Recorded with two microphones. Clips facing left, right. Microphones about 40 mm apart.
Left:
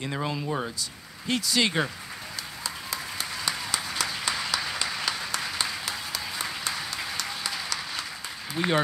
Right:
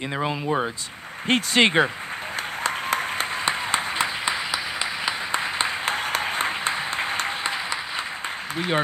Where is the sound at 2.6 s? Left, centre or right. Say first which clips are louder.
Right 11 dB; right.